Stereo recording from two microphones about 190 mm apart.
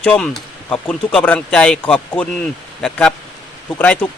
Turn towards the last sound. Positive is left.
turn(degrees=10)  # may be behind; listen again after turning